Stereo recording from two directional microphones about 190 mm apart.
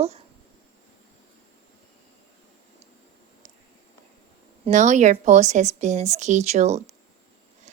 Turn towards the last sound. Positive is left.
turn(degrees=-35)  # may be behind; listen again after turning